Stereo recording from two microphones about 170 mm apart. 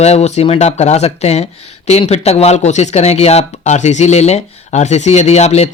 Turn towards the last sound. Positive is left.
turn(degrees=40)  # may be behind; listen again after turning